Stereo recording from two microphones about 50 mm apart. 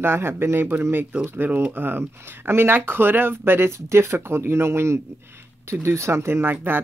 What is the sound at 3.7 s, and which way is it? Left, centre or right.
Speech, right.